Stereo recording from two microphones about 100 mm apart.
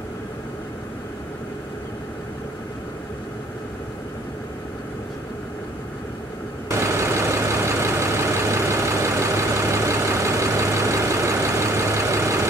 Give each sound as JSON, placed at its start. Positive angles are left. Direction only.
{"t": 6.7, "sound": "vehicle", "side_deg": -30}